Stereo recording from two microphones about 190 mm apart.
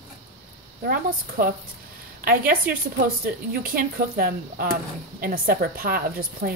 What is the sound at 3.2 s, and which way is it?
Speech, 50° right (ahead or behind).